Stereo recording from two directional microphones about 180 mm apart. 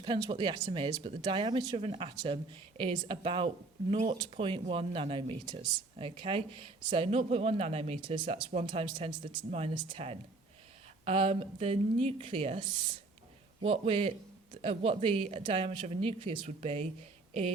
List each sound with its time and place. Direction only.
0.0 s a man's voice: 25° right (ahead or behind)